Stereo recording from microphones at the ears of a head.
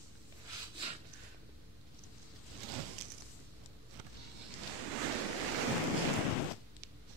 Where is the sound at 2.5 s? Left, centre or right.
Right.